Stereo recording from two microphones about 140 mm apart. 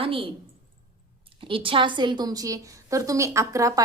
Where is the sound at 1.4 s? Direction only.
40° right (ahead or behind).